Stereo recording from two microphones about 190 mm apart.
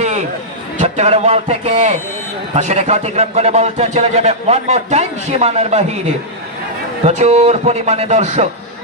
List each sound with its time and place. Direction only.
0.7 s a man's voice: 35° right (ahead or behind)
7.1 s a man's voice: 35° right (ahead or behind)